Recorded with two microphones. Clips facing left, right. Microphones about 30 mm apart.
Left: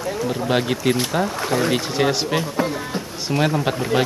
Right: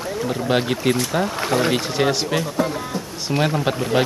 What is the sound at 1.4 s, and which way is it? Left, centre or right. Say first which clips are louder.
Speech: right 3 dB; centre.